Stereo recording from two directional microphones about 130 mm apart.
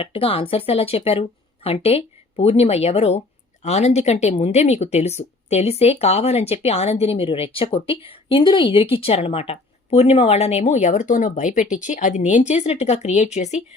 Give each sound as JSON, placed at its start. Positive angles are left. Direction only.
{"t": 0.0, "sound": "a woman's voice", "side_deg": 45}